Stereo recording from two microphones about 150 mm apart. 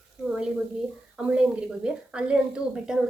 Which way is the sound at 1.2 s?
5° right (ahead or behind).